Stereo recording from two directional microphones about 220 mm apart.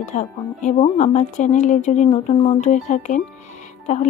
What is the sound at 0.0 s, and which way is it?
Speech, 35° left (ahead or behind).